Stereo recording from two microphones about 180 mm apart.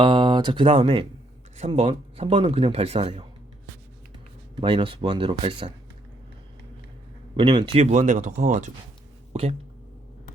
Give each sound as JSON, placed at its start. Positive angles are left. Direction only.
{"t": 0.0, "sound": "speech", "side_deg": -25}
{"t": 4.6, "sound": "speech", "side_deg": -30}
{"t": 7.3, "sound": "speech", "side_deg": -25}